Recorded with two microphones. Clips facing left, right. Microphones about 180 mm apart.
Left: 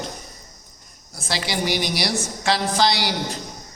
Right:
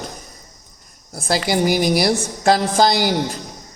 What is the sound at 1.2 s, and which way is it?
A man's voice, 50° right (ahead or behind).